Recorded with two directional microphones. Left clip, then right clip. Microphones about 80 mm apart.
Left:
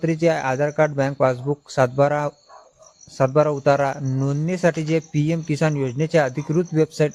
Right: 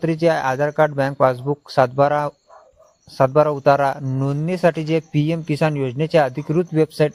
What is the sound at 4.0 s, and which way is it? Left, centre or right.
Speech, centre.